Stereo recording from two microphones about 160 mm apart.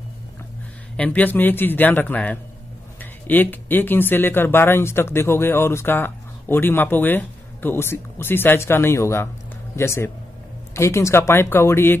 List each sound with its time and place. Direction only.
0.9 s speech: 10° left (ahead or behind)